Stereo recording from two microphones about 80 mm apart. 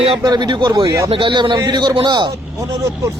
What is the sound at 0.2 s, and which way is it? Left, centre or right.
Speech, right.